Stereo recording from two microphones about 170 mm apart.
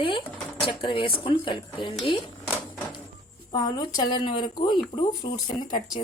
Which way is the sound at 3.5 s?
25° left (ahead or behind).